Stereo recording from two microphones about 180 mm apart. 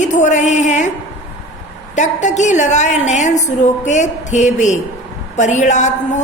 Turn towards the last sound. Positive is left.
turn(degrees=40)  # may be behind; listen again after turning